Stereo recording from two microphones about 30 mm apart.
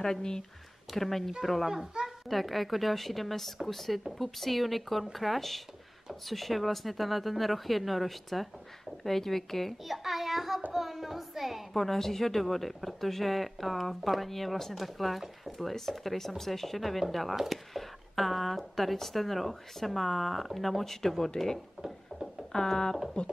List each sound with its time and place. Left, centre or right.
0.0 s speech: left
0.9 s speech: centre
9.8 s child singing: centre
10.7 s a sound: centre
11.7 s speech: centre
22.1 s a sound: left
22.5 s speech: left